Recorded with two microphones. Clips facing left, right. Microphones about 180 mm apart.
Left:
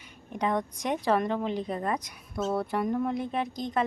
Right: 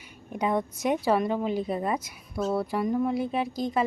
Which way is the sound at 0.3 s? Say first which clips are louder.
Right 2 dB; 10° right (ahead or behind).